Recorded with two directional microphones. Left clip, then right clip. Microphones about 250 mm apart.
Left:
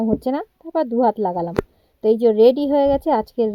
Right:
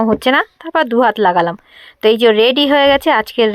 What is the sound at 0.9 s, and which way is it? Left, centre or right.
Speech, right.